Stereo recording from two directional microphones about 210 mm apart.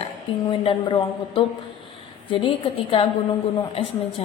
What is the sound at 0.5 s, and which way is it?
Speech, 25° left (ahead or behind).